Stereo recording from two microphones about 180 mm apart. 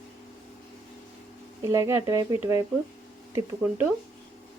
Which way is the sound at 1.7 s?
15° right (ahead or behind).